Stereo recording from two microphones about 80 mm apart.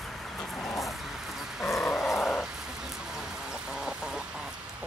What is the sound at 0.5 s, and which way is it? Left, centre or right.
Vehicle, centre.